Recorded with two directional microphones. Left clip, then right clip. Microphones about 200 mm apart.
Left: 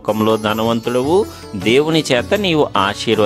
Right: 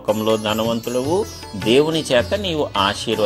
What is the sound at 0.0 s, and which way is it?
Speech, 40° left (ahead or behind).